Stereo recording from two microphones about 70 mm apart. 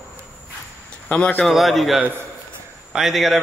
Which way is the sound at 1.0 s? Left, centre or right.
Centre.